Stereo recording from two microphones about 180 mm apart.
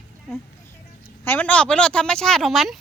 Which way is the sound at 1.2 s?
10° left (ahead or behind).